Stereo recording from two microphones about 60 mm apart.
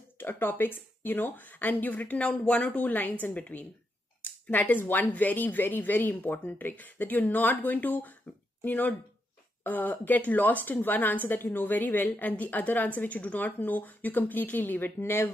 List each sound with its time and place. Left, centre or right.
0.2 s a woman's voice: left